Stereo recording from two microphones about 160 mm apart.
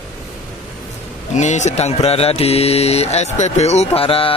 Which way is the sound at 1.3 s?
45° left (ahead or behind).